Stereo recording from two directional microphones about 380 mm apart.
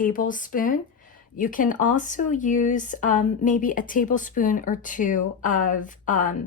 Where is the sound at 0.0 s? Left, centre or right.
Left.